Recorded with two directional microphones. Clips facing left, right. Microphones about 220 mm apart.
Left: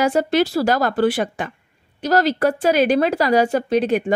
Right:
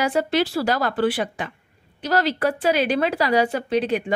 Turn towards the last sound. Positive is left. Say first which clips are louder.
# left 4 dB
turn(degrees=45)  # may be behind; listen again after turning